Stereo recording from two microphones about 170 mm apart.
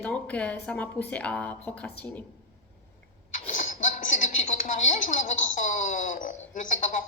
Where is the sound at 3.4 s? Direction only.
45° left (ahead or behind).